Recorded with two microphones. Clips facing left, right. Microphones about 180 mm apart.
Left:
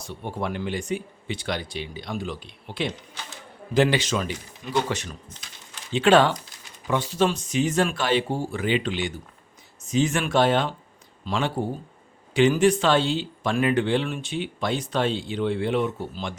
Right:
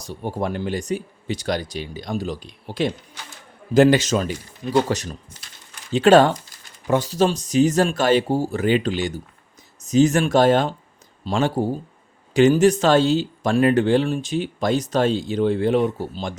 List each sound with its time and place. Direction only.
0.0 s speech: 40° right (ahead or behind)